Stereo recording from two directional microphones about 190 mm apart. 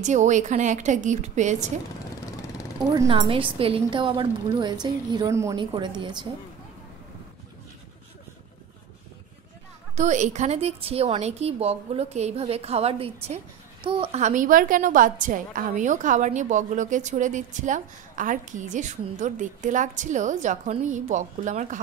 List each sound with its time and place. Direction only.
0.0 s a woman's voice: 40° right (ahead or behind)
2.9 s a woman's voice: 25° right (ahead or behind)
9.9 s a woman's voice: 40° right (ahead or behind)